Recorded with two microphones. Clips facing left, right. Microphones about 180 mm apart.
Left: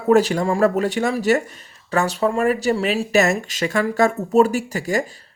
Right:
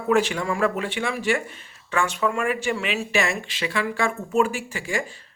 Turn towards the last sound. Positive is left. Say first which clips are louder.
# left 6 dB
turn(degrees=40)  # may be behind; listen again after turning